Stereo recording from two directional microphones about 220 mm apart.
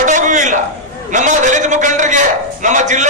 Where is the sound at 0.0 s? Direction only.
35° right (ahead or behind).